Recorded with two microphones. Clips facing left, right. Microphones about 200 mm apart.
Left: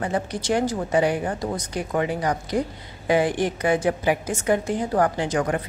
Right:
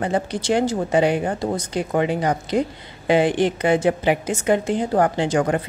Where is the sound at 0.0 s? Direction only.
30° right (ahead or behind).